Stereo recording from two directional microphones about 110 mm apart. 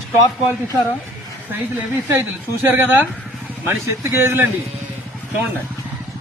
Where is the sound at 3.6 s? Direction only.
20° right (ahead or behind).